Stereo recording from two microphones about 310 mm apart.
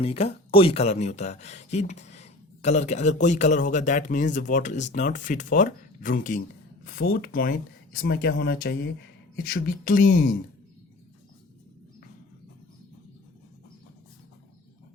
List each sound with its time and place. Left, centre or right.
0.0 s speech: centre